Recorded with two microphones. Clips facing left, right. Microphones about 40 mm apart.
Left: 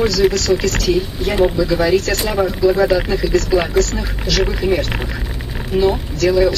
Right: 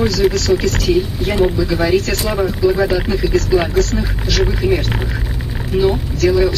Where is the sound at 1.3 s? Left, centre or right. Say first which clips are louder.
Left 1 dB; centre.